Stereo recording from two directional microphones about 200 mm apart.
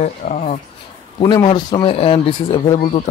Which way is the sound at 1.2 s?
20° left (ahead or behind).